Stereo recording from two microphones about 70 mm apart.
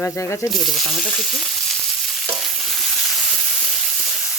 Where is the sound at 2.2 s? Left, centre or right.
Centre.